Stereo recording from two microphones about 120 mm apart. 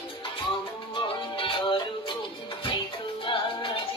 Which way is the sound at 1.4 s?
45° left (ahead or behind).